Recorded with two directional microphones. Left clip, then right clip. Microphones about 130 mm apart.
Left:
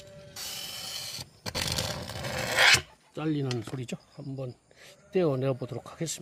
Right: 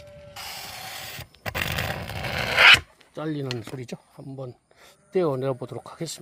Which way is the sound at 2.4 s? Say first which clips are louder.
Right 7 dB; 80° right.